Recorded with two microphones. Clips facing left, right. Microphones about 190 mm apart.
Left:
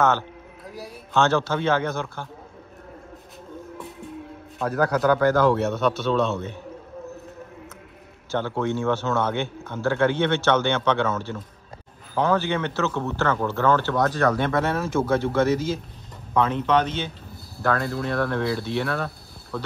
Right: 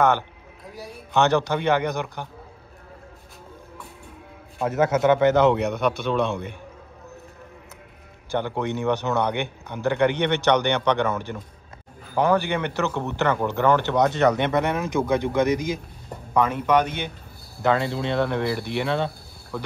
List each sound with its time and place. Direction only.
1.1 s speech: 15° right (ahead or behind)
4.6 s speech: 20° right (ahead or behind)
8.3 s speech: 15° right (ahead or behind)
19.5 s speech: 10° right (ahead or behind)